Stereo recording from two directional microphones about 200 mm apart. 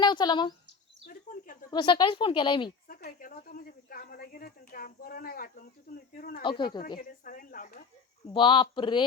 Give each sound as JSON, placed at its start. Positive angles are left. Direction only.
{"t": 0.0, "sound": "speech", "side_deg": 20}
{"t": 1.0, "sound": "a sound", "side_deg": 45}
{"t": 1.7, "sound": "a woman's voice", "side_deg": 25}
{"t": 2.8, "sound": "speech", "side_deg": 45}
{"t": 6.4, "sound": "a woman's voice", "side_deg": 25}
{"t": 7.0, "sound": "speech", "side_deg": 45}
{"t": 8.3, "sound": "a woman's voice", "side_deg": 25}